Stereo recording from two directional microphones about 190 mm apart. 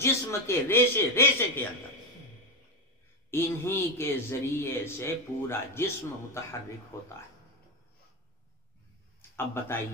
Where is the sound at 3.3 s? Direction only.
10° left (ahead or behind).